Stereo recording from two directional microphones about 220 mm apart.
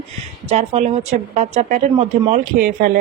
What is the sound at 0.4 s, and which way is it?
Speech, 30° right (ahead or behind).